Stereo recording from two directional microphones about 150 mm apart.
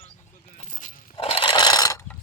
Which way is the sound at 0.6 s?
55° left (ahead or behind).